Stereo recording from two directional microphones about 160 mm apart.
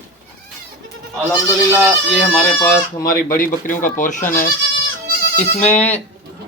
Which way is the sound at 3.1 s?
65° left (ahead or behind).